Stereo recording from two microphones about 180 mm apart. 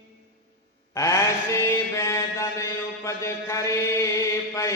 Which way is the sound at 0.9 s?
20° left (ahead or behind).